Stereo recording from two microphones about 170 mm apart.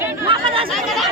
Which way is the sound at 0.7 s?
Centre (ahead or behind).